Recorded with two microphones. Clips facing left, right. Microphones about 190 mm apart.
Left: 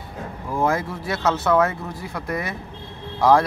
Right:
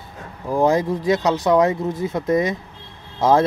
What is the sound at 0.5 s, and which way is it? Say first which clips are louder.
Speech: right 5 dB; 15° right (ahead or behind).